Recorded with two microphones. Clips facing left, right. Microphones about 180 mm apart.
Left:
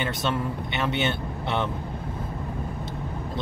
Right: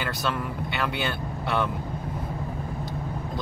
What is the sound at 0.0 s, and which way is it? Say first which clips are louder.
Speech: left 2 dB; 25° left (ahead or behind).